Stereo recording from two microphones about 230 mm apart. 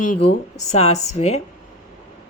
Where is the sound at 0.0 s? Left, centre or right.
Left.